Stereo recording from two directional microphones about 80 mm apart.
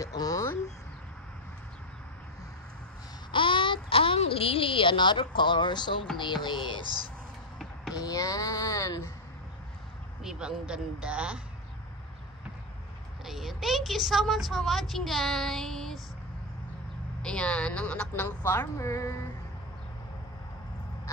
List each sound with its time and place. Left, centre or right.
0.0 s a sound: left
3.3 s a sound: left
4.7 s speech: left
7.9 s speech: left
10.2 s speech: centre
13.2 s a woman's voice: centre
17.2 s a woman's voice: centre; by 19.2 s left